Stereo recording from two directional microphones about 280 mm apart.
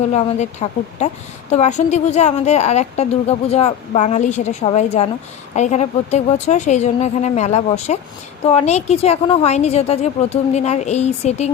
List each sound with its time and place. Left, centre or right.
0.1 s a woman's voice: left